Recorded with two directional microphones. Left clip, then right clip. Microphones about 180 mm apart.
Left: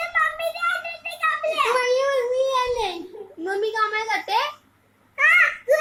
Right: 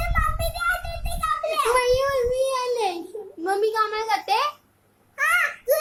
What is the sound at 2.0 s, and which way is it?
Child singing, 25° right (ahead or behind).